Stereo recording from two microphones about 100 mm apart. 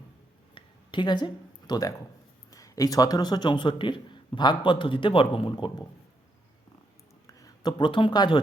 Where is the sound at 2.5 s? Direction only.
35° left (ahead or behind); by 5.7 s 55° left (ahead or behind).